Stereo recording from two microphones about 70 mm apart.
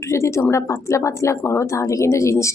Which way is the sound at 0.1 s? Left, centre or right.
Left.